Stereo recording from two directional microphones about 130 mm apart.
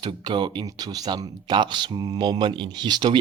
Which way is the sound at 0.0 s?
35° right (ahead or behind).